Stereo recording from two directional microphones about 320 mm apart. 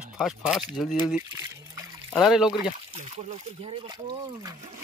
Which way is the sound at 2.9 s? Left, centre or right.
Centre.